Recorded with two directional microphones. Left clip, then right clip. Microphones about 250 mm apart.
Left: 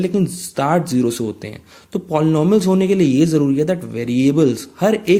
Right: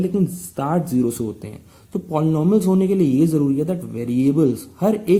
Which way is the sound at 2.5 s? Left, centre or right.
Left.